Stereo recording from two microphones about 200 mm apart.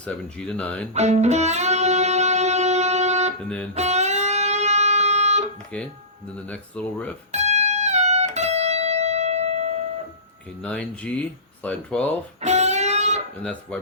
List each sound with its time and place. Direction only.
0.0 s speech: 5° left (ahead or behind)
0.9 s music: 35° right (ahead or behind)
5.7 s speech: 5° left (ahead or behind)
7.3 s music: 35° right (ahead or behind)
10.6 s speech: 5° left (ahead or behind)
12.4 s music: 35° right (ahead or behind)
13.4 s speech: 5° left (ahead or behind)